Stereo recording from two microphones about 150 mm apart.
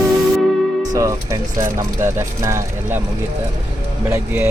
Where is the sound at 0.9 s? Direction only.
20° right (ahead or behind).